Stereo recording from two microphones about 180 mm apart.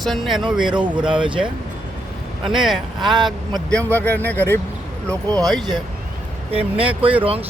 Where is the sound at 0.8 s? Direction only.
25° right (ahead or behind).